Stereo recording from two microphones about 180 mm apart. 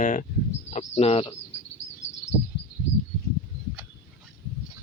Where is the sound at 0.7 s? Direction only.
35° left (ahead or behind).